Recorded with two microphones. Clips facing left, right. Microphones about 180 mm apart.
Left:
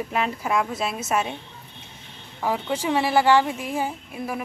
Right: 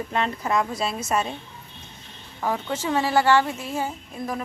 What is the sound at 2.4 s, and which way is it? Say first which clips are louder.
A woman's voice: left 1 dB; 10° left (ahead or behind).